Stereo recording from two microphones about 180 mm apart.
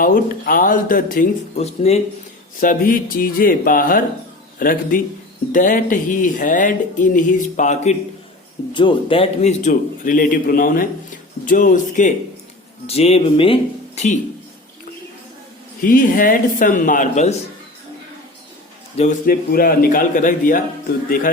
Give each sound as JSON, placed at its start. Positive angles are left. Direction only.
{"t": 0.0, "sound": "speech", "side_deg": 50}
{"t": 2.6, "sound": "speech", "side_deg": 50}
{"t": 8.7, "sound": "speech", "side_deg": 25}
{"t": 12.9, "sound": "speech", "side_deg": 35}
{"t": 15.8, "sound": "speech", "side_deg": 50}
{"t": 18.9, "sound": "speech", "side_deg": 45}